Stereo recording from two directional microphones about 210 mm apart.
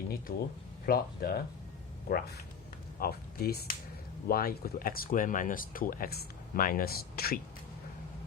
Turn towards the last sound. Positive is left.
turn(degrees=45)  # may be behind; listen again after turning